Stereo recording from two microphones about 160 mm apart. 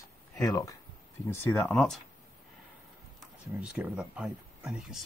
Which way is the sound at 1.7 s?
5° left (ahead or behind).